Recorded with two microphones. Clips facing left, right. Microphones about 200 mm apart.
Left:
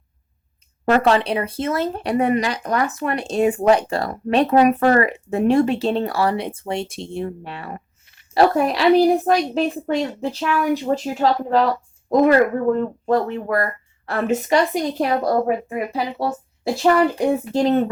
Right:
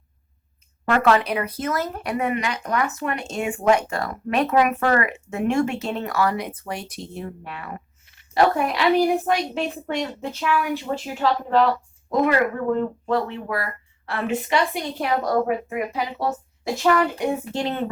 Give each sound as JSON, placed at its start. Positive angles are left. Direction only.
{"t": 0.9, "sound": "speech", "side_deg": 30}